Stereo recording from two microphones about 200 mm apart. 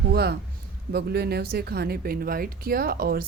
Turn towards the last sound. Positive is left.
turn(degrees=-50)  # may be behind; listen again after turning